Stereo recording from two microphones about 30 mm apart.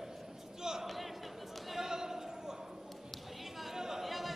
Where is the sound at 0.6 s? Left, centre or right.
Centre.